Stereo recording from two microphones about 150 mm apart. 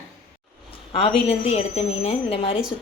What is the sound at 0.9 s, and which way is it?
A woman's voice, 35° left (ahead or behind).